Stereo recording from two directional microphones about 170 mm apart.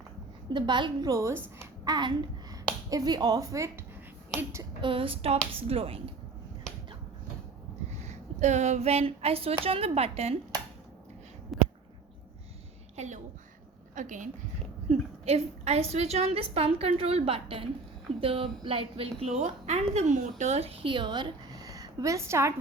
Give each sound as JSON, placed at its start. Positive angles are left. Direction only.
{"t": 0.5, "sound": "a child's voice", "side_deg": -25}
{"t": 4.8, "sound": "a woman's voice", "side_deg": -30}
{"t": 8.1, "sound": "a woman's voice", "side_deg": -45}
{"t": 11.5, "sound": "a sound", "side_deg": 0}
{"t": 13.0, "sound": "a sound", "side_deg": -45}
{"t": 13.9, "sound": "a woman's voice", "side_deg": -50}